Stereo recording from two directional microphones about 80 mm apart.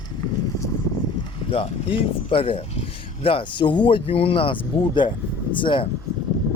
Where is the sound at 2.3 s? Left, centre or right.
Left.